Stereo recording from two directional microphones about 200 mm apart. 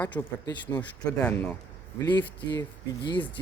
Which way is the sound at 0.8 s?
10° left (ahead or behind).